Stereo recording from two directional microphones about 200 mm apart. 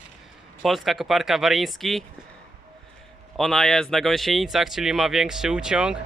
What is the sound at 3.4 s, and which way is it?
Speech, centre (ahead or behind).